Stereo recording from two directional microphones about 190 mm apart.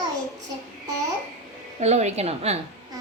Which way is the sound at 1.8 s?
35° right (ahead or behind).